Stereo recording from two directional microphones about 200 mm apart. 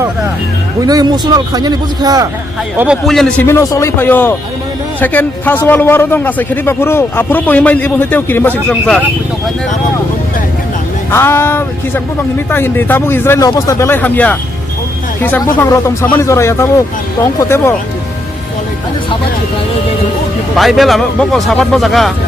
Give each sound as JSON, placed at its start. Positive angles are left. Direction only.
{"t": 0.8, "sound": "a man's voice", "side_deg": -20}
{"t": 2.7, "sound": "a man's voice", "side_deg": -5}
{"t": 11.1, "sound": "a man's voice", "side_deg": 10}
{"t": 20.6, "sound": "speech", "side_deg": 0}